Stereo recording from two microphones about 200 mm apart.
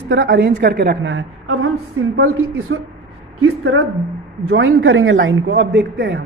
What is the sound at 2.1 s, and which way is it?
A woman's voice, 90° right.